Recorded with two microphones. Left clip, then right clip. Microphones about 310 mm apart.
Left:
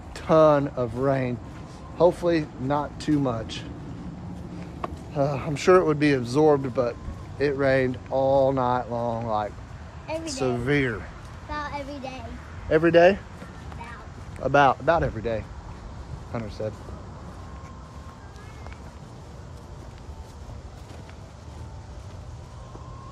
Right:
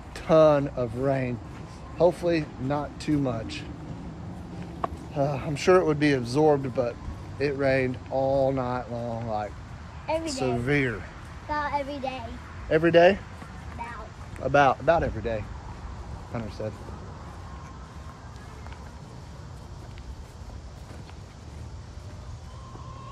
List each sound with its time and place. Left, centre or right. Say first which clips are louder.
0.1 s speech: left 1 dB; centre
4.8 s speech: left 1 dB; centre
10.1 s speech: right 4 dB; right
10.4 s speech: left 4 dB; centre
11.4 s a child's voice: right 4 dB; right
12.6 s speech: left 1 dB; centre
14.4 s speech: left 2 dB; centre